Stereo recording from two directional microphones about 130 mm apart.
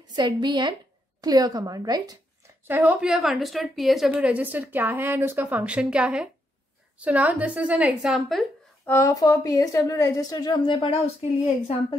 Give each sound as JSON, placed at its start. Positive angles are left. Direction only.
{"t": 0.0, "sound": "a woman's voice", "side_deg": -35}
{"t": 2.6, "sound": "a woman's voice", "side_deg": -15}
{"t": 8.8, "sound": "a woman's voice", "side_deg": 20}